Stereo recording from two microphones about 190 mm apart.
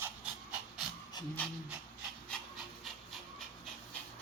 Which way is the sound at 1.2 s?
25° left (ahead or behind).